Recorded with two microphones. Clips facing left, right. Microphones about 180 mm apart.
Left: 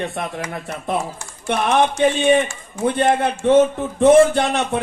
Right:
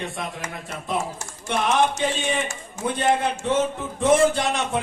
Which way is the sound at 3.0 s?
60° left (ahead or behind).